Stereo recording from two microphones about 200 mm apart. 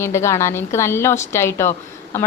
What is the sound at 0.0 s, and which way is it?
Speech, 15° left (ahead or behind).